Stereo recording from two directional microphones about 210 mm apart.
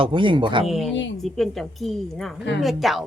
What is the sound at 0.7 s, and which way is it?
Speech, centre (ahead or behind).